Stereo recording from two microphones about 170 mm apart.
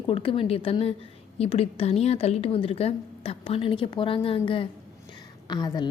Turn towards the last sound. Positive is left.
turn(degrees=25)  # may be behind; listen again after turning